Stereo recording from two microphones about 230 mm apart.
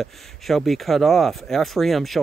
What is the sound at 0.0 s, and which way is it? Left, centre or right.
Speech, centre.